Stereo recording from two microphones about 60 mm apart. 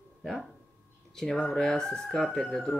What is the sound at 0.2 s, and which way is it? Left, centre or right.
Speech, centre.